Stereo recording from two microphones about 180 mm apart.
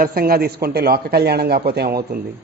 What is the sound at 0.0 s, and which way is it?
A man's voice, 55° right (ahead or behind).